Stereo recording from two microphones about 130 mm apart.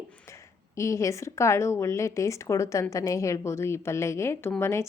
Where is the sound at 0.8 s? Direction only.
25° left (ahead or behind).